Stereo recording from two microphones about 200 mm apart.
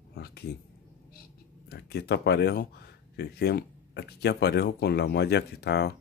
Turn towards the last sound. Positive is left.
turn(degrees=55)  # may be behind; listen again after turning